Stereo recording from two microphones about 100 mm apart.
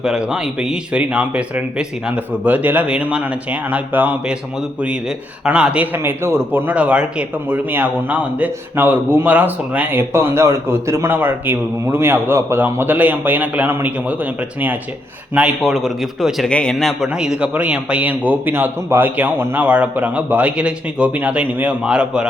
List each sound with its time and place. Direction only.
0.0 s a man's voice: 5° right (ahead or behind)
5.5 s a man's voice: 10° right (ahead or behind)
15.4 s a man's voice: 10° right (ahead or behind)
16.5 s a man's voice: 10° left (ahead or behind)
16.7 s a man's voice: centre (ahead or behind)